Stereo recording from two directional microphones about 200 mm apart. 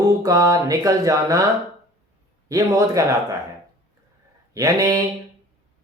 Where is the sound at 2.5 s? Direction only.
15° right (ahead or behind).